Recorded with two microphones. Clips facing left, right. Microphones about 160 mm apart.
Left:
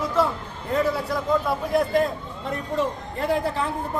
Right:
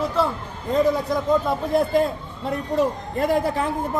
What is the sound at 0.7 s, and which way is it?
Speech, 15° right (ahead or behind).